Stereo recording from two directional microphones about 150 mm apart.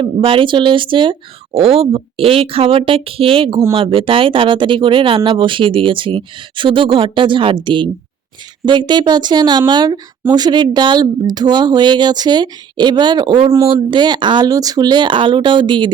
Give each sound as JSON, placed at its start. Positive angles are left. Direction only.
{"t": 0.0, "sound": "speech", "side_deg": -35}